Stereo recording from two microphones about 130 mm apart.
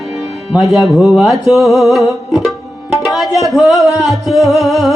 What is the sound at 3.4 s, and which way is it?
Speech, centre (ahead or behind).